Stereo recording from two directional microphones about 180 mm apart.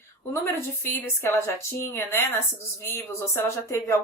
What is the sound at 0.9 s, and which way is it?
Speech, 15° left (ahead or behind).